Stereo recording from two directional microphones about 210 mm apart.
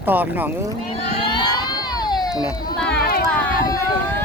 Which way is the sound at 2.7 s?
5° left (ahead or behind).